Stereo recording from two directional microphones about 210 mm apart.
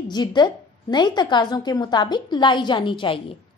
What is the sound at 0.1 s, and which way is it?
A woman's voice, 20° left (ahead or behind).